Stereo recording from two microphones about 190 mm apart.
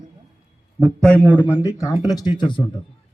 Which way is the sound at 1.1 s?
10° right (ahead or behind).